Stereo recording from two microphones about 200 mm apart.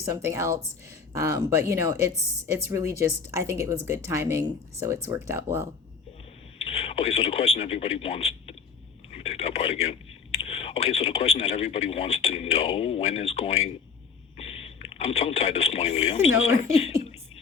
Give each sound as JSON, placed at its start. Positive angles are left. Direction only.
{"t": 0.0, "sound": "a woman's voice", "side_deg": -15}
{"t": 6.7, "sound": "a man's voice", "side_deg": 30}